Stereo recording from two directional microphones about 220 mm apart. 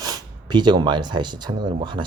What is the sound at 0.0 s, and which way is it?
Speech, 20° right (ahead or behind).